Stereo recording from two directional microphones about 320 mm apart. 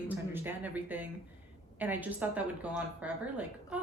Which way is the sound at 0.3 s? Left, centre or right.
Centre.